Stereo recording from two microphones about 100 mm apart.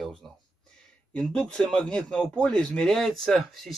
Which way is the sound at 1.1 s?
10° left (ahead or behind).